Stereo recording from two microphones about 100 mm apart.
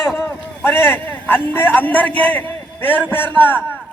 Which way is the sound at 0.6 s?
20° left (ahead or behind).